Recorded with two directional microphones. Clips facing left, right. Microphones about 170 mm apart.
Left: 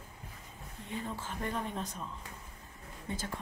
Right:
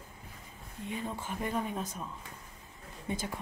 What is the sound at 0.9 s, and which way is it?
Speech, 15° right (ahead or behind).